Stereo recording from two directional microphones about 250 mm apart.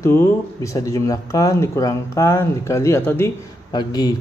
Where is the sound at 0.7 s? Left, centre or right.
Centre.